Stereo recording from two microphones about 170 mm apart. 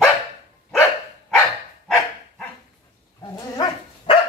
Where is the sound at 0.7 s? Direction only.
Centre (ahead or behind).